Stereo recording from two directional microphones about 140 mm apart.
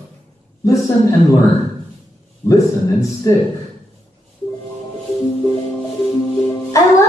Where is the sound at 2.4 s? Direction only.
20° left (ahead or behind).